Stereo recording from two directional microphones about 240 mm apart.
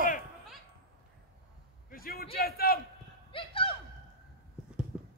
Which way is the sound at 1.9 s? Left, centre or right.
Left.